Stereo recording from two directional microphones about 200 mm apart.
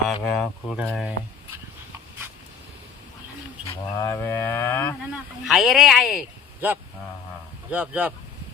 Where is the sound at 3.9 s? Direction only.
15° left (ahead or behind).